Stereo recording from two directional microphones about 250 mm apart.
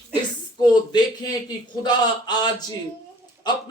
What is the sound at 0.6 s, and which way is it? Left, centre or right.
A man's voice, centre.